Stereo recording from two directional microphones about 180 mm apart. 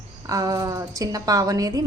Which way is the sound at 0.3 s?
20° right (ahead or behind).